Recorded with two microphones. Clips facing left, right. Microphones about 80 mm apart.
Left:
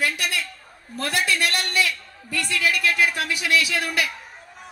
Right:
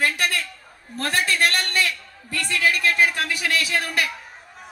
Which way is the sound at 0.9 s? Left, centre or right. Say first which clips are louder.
Right 1 dB; right.